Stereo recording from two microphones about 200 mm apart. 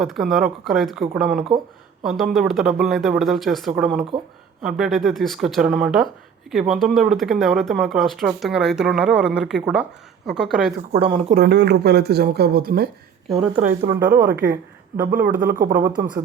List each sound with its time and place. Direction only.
0.0 s speech: centre (ahead or behind)
4.1 s a woman's voice: 20° right (ahead or behind)
4.6 s speech: centre (ahead or behind)
11.1 s speech: 45° right (ahead or behind)
14.0 s speech: 45° right (ahead or behind)